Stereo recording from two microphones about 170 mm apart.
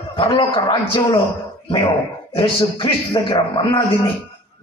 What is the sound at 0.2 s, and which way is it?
A man's voice, 30° left (ahead or behind).